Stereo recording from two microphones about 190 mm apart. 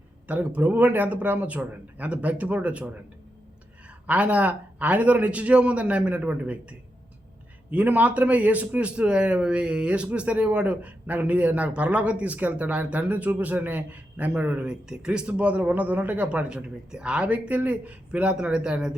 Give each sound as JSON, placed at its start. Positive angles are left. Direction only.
{"t": 0.3, "sound": "a man's voice", "side_deg": -10}
{"t": 4.0, "sound": "a man's voice", "side_deg": -5}